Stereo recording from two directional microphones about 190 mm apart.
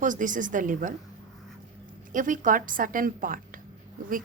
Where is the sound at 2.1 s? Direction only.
45° right (ahead or behind).